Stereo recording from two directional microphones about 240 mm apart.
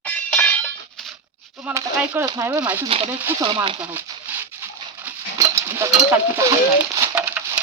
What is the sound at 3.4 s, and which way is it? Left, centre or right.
Speech, right.